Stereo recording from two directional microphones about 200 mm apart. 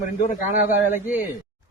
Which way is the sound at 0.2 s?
40° left (ahead or behind).